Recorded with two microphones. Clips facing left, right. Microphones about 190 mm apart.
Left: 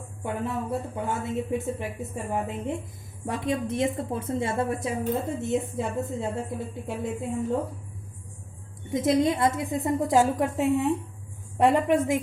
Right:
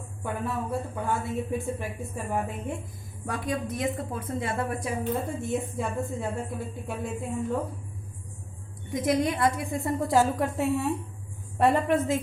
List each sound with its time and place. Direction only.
0.2 s a woman's voice: 20° left (ahead or behind)
8.9 s a woman's voice: 25° left (ahead or behind)